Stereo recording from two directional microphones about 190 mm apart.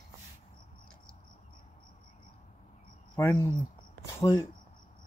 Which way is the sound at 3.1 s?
15° left (ahead or behind).